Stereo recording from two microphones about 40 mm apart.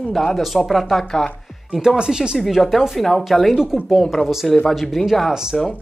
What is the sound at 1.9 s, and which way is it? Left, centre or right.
Speech, right.